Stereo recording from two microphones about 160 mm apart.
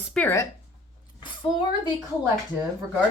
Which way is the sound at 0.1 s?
10° left (ahead or behind).